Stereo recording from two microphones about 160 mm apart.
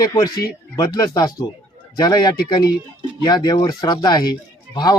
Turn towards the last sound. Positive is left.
turn(degrees=25)  # may be behind; listen again after turning